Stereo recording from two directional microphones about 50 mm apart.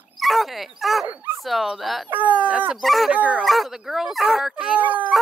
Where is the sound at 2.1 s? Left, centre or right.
Right.